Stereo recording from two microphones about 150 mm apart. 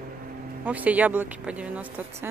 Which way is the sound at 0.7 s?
10° right (ahead or behind).